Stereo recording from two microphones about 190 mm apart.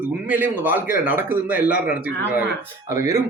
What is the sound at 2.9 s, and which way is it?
Speech, 15° right (ahead or behind).